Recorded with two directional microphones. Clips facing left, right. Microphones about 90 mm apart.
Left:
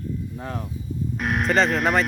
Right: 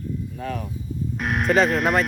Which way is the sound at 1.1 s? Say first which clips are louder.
Right 1 dB; centre (ahead or behind).